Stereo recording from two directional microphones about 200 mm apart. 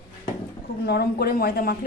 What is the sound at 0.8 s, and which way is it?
Speech, 55° left (ahead or behind).